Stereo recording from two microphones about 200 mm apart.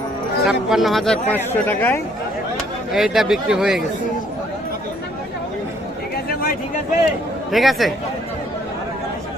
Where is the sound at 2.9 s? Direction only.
Centre (ahead or behind).